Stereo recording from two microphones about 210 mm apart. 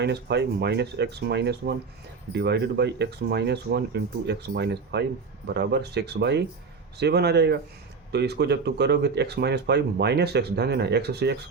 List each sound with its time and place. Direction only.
0.0 s speech: 55° right (ahead or behind)